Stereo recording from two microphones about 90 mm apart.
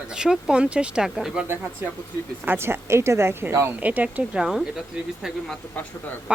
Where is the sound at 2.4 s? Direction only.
25° right (ahead or behind).